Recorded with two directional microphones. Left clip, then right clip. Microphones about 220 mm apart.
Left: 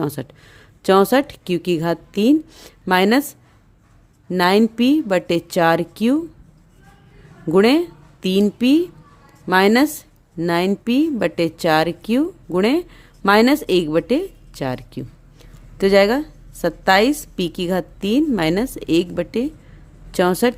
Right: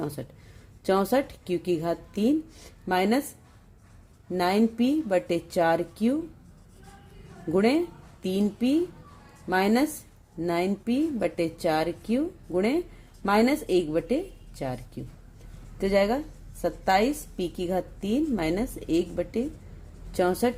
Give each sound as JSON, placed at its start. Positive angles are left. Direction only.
{"t": 0.0, "sound": "a woman's voice", "side_deg": 40}
{"t": 4.3, "sound": "a woman's voice", "side_deg": 40}
{"t": 7.5, "sound": "a woman's voice", "side_deg": 40}